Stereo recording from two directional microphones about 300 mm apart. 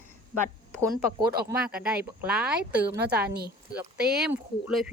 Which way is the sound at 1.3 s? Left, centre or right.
Right.